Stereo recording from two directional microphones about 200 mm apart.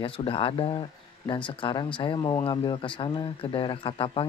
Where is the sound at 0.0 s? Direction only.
25° left (ahead or behind).